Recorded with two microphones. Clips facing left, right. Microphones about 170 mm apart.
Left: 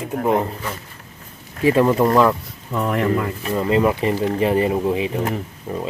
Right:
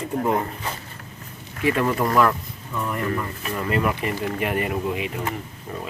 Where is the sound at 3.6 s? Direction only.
25° left (ahead or behind).